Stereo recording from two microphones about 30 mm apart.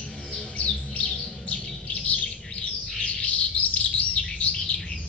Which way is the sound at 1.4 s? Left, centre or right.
Left.